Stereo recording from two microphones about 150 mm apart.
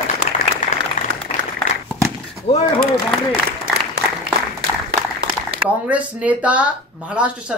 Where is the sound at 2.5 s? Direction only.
35° left (ahead or behind).